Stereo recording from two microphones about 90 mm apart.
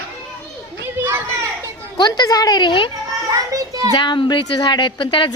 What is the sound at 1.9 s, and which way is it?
Speech, 50° left (ahead or behind).